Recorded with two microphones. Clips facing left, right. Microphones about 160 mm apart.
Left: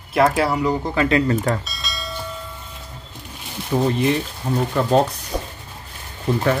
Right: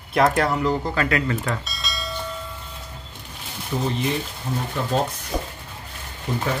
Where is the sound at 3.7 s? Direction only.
60° left (ahead or behind).